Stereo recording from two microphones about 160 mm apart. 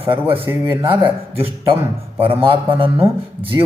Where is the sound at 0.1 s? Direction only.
35° right (ahead or behind).